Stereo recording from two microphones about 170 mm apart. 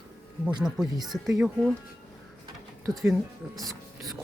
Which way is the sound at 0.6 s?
Centre (ahead or behind).